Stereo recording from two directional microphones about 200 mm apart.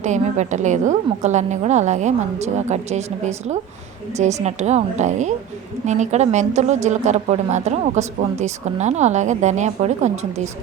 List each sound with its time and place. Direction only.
0.0 s a woman's voice: 35° right (ahead or behind)